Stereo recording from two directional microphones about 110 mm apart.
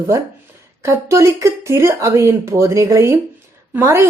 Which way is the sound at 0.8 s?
25° right (ahead or behind).